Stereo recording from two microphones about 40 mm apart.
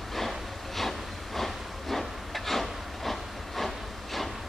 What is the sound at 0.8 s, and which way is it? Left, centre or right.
Wood, centre.